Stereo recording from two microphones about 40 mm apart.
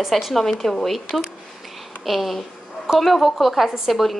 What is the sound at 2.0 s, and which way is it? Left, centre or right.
A woman's voice, centre.